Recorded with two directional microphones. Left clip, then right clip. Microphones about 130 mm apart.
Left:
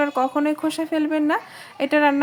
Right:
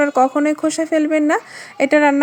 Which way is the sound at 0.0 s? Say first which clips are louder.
Right 6 dB; 25° right (ahead or behind).